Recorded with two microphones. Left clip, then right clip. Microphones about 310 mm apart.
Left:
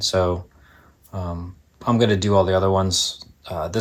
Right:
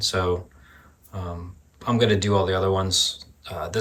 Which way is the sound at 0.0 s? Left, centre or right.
Centre.